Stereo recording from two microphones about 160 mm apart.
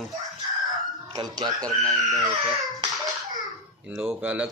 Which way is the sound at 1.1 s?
25° right (ahead or behind).